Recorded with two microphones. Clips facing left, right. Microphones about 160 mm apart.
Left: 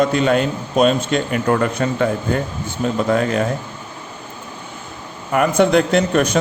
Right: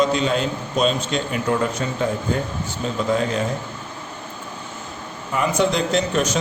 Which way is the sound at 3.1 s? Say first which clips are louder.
Left 3 dB; 60° left (ahead or behind).